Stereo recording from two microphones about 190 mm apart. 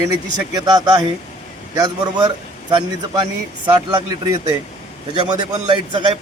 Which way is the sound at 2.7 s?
25° right (ahead or behind).